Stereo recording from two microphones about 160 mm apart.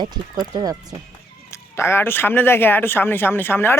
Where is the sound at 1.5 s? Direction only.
15° left (ahead or behind).